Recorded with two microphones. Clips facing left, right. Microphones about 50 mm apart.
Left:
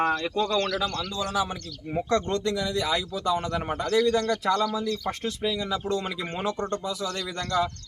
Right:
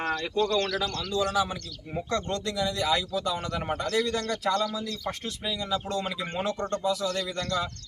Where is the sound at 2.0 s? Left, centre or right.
Left.